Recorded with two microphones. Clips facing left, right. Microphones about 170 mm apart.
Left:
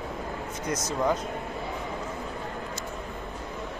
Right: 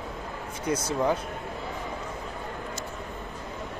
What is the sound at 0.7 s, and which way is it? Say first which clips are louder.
Speech: right 3 dB; 30° right (ahead or behind).